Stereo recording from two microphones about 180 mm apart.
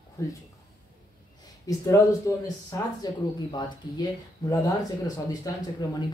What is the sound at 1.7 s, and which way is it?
Speech, 20° left (ahead or behind).